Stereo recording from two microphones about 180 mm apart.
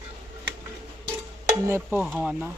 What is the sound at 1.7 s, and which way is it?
Speech, 10° right (ahead or behind).